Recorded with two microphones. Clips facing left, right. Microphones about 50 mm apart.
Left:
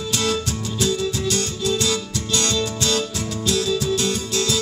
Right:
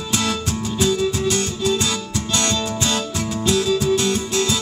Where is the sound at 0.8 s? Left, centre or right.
Right.